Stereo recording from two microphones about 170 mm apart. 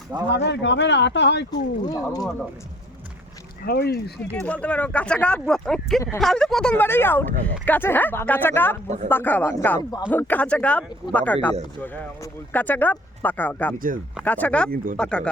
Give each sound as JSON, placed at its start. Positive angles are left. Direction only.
{"t": 0.3, "sound": "speech", "side_deg": 90}
{"t": 1.5, "sound": "speech", "side_deg": 20}
{"t": 3.7, "sound": "speech", "side_deg": 70}
{"t": 4.2, "sound": "speech", "side_deg": 10}
{"t": 13.7, "sound": "speech", "side_deg": -55}
{"t": 14.3, "sound": "speech", "side_deg": 10}